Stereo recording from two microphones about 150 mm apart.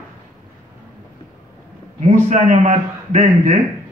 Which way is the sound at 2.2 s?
50° right (ahead or behind).